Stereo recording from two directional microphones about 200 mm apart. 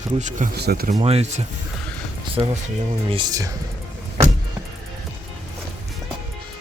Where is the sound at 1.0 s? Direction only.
30° right (ahead or behind).